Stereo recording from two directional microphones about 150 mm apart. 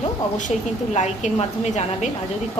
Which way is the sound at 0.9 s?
50° left (ahead or behind).